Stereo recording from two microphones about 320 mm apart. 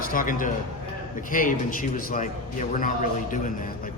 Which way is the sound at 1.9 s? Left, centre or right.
Left.